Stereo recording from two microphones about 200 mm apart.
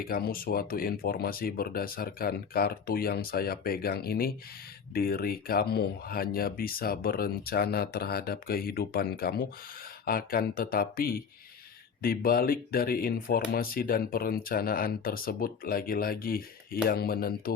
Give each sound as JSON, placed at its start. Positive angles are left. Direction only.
{"t": 0.0, "sound": "speech", "side_deg": 45}